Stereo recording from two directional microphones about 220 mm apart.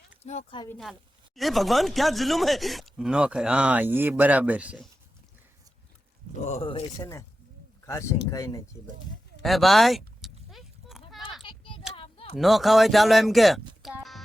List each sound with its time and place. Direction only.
0.2 s speech: 30° left (ahead or behind)
0.7 s speech: centre (ahead or behind)
6.4 s speech: 30° left (ahead or behind)
7.0 s speech: 15° left (ahead or behind)
9.4 s a sound: centre (ahead or behind)
11.4 s a sound: 25° left (ahead or behind)
12.4 s speech: centre (ahead or behind)